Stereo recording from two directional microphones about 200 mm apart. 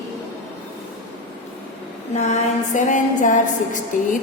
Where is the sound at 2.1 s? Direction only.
40° left (ahead or behind).